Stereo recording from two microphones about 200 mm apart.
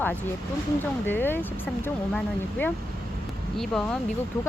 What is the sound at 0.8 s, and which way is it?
Speech, 10° left (ahead or behind).